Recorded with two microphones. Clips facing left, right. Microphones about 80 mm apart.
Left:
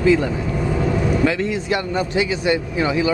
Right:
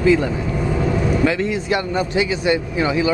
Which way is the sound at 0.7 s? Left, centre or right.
Right.